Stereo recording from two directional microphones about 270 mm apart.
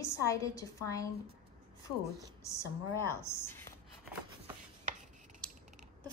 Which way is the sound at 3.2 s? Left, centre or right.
Centre.